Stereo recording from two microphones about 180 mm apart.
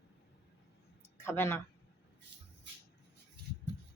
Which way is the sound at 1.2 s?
15° left (ahead or behind).